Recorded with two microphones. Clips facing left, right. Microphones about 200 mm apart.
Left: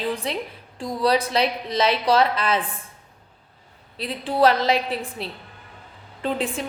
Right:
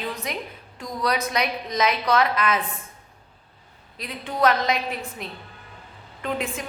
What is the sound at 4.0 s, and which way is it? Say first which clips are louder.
A woman's voice: left 4 dB; 30° left (ahead or behind).